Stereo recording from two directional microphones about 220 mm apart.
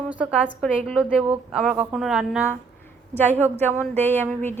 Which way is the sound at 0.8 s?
5° right (ahead or behind).